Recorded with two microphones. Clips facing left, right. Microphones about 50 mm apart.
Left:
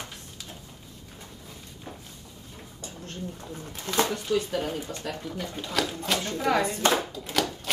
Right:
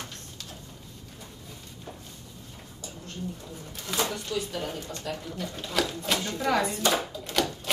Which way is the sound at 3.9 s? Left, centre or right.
Left.